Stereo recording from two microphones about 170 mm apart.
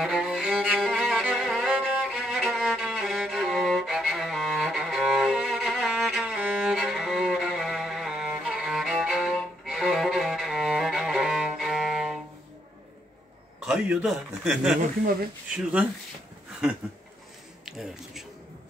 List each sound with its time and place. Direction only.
0.0 s music: centre (ahead or behind)
13.7 s a man's voice: 5° right (ahead or behind)
17.6 s a sound: 5° right (ahead or behind)